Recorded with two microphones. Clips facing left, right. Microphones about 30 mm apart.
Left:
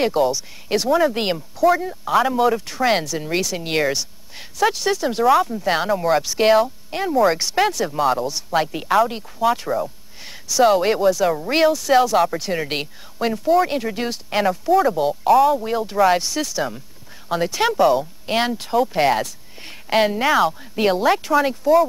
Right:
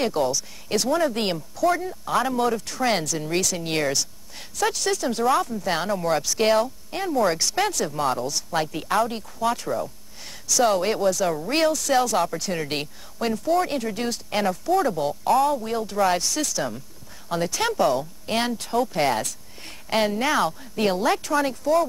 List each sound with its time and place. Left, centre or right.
0.0 s speech: centre